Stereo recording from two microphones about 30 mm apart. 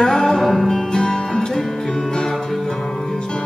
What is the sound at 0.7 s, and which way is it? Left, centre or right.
Music, left.